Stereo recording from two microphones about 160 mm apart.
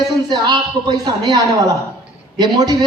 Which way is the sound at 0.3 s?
25° right (ahead or behind).